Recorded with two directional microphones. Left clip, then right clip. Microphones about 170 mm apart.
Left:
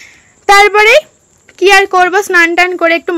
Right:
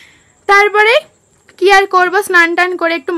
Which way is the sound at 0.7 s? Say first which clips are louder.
Left 3 dB; 15° left (ahead or behind).